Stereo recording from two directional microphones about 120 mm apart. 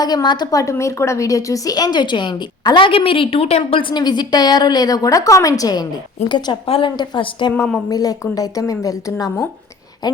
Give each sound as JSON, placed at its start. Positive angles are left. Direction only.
{"t": 0.0, "sound": "a woman's voice", "side_deg": 35}
{"t": 6.2, "sound": "a woman's voice", "side_deg": 40}